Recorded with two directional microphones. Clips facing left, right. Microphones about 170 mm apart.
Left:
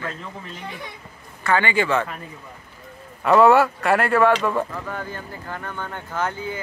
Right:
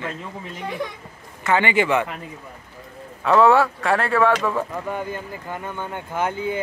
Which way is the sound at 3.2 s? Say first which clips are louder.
Left 1 dB; 5° left (ahead or behind).